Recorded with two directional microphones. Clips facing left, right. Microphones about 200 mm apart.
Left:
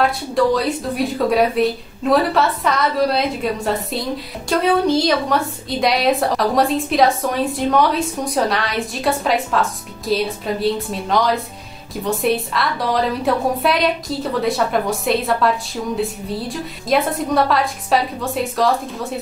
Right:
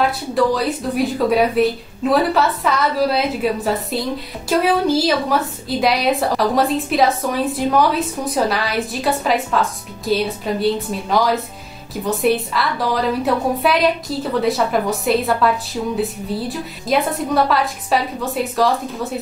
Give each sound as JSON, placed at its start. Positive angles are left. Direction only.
{"t": 0.0, "sound": "a woman's voice", "side_deg": 0}